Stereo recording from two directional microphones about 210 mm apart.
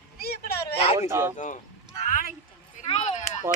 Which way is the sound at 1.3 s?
35° left (ahead or behind).